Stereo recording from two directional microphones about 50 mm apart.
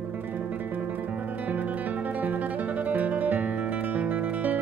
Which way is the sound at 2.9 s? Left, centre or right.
Right.